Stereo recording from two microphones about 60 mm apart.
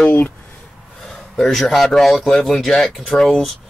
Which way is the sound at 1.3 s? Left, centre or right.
Centre.